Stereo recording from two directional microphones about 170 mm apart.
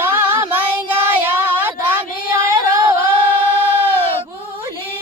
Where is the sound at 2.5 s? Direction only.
30° right (ahead or behind).